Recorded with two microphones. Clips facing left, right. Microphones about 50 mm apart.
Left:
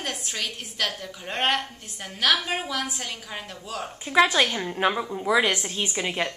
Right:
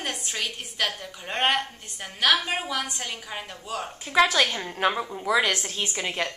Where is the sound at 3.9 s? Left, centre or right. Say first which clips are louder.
Left 1 dB; centre.